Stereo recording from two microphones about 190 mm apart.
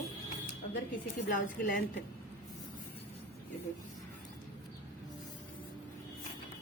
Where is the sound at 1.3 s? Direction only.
45° left (ahead or behind).